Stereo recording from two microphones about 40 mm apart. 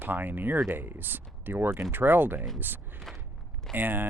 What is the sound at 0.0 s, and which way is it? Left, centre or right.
Speech, right.